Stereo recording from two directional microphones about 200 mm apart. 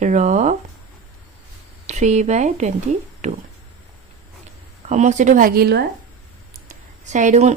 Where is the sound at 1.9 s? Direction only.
35° right (ahead or behind).